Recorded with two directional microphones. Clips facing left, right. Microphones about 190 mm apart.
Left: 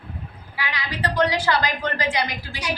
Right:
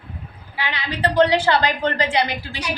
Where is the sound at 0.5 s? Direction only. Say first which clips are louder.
Right 3 dB; 25° right (ahead or behind).